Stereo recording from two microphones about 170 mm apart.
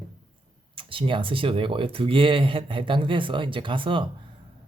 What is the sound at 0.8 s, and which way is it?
Speech, 30° right (ahead or behind).